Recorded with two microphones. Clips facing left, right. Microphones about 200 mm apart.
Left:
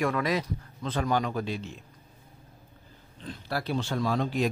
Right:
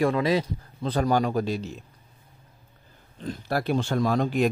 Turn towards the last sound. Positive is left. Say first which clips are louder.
# right 4 dB
turn(degrees=-50)  # may be behind; listen again after turning